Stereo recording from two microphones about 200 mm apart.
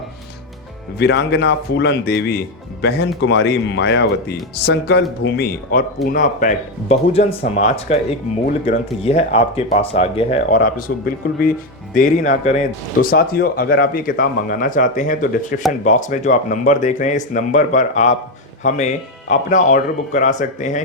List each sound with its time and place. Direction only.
0.9 s a man's voice: 55° left (ahead or behind)
6.1 s speech: 40° left (ahead or behind)
9.0 s a man's voice: 30° left (ahead or behind)